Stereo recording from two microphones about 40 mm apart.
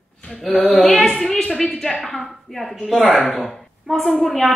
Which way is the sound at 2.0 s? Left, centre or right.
Centre.